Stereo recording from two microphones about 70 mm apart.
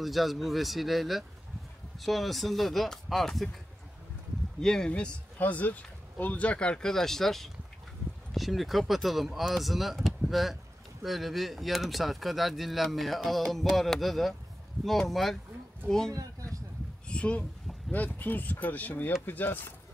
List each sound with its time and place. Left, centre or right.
0.0 s speech: centre
4.6 s speech: centre
16.1 s speech: right
17.1 s speech: centre